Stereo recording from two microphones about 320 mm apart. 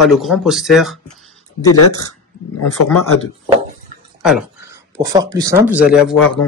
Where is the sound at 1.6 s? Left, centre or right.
Left.